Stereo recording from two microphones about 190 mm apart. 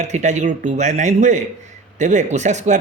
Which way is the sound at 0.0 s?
40° right (ahead or behind).